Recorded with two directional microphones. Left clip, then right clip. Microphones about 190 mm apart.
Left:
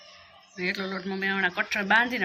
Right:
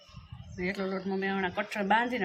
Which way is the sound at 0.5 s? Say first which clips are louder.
Left 3 dB; 10° right (ahead or behind).